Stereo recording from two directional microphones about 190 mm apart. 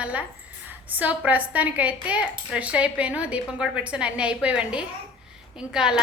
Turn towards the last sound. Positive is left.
turn(degrees=-5)  # may be behind; listen again after turning